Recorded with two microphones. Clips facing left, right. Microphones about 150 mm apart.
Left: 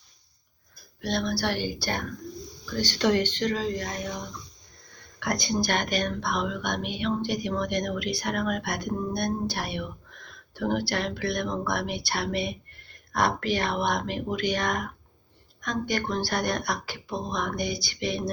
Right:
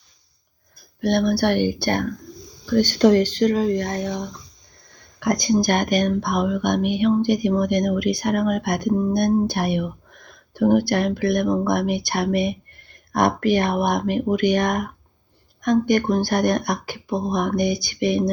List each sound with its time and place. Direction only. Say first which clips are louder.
1.0 s speech: right 9 dB; 55° right (ahead or behind)
5.2 s speech: right 8 dB; 40° right (ahead or behind)